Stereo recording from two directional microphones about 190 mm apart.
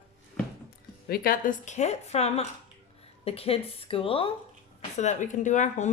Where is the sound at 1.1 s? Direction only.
50° left (ahead or behind); by 4.3 s 30° left (ahead or behind).